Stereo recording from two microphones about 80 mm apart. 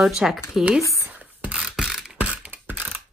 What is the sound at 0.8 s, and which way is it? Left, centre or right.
Speech, left.